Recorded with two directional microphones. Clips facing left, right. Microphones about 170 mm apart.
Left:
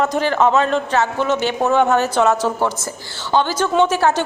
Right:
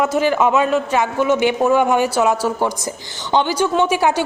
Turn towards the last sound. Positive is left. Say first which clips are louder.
# left 1 dB
turn(degrees=-10)  # may be behind; listen again after turning